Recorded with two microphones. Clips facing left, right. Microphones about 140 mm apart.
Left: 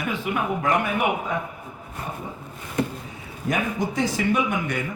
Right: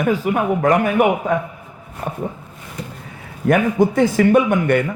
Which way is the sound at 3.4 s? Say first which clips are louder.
Right 10 dB; 55° right (ahead or behind).